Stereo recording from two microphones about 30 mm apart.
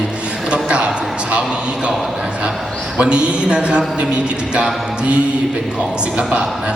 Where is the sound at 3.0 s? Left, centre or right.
Right.